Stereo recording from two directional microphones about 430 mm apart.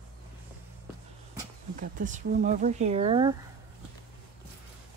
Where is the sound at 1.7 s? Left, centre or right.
Centre.